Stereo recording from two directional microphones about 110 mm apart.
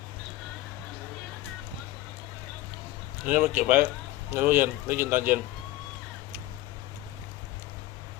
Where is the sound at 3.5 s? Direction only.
15° right (ahead or behind).